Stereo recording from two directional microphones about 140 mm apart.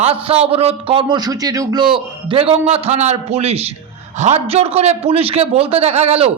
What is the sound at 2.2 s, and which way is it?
A woman's voice, 40° right (ahead or behind).